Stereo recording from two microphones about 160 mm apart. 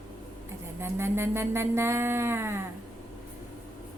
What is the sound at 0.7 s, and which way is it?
Music, 15° right (ahead or behind).